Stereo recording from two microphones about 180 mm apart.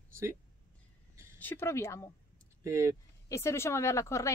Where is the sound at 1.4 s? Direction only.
10° left (ahead or behind).